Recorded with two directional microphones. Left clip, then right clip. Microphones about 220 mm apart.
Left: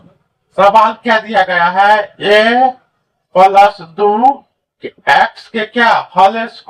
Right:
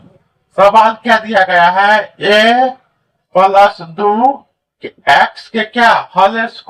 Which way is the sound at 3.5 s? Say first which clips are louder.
Left 1 dB; 25° right (ahead or behind).